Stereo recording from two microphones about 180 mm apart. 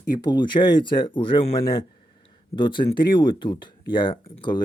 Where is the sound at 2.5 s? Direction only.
25° left (ahead or behind).